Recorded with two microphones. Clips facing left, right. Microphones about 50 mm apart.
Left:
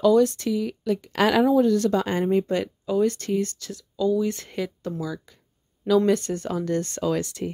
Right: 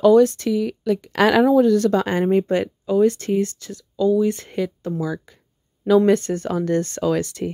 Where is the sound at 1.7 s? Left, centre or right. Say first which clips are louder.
Right 4 dB; right.